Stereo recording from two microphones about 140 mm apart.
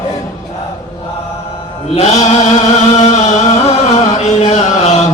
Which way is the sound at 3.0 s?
60° left (ahead or behind).